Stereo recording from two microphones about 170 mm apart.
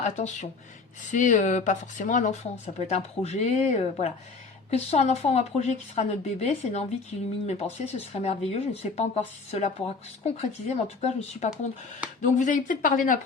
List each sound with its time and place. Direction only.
0.0 s speech: 40° left (ahead or behind)